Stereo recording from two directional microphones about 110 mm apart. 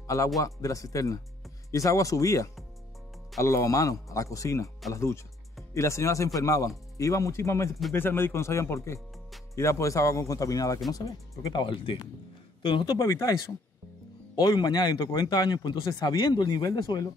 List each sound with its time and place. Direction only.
0.0 s a man's voice: 30° left (ahead or behind)
11.6 s speech: 50° left (ahead or behind)
14.3 s speech: 40° left (ahead or behind)